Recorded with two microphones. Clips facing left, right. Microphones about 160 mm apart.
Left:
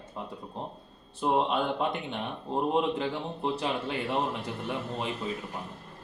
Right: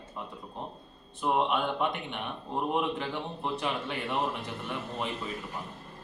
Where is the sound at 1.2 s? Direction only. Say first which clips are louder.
Left 1 dB; 30° left (ahead or behind).